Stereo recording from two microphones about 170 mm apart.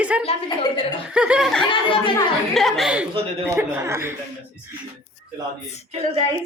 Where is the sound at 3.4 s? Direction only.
15° right (ahead or behind).